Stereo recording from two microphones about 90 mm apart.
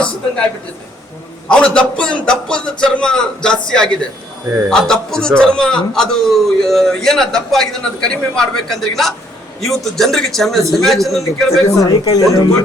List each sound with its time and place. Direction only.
1.5 s a man's voice: 10° left (ahead or behind)
12.0 s speech: 45° left (ahead or behind)